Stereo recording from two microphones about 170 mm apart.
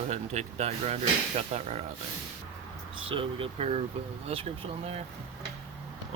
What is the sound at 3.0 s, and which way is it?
Speech, 30° right (ahead or behind).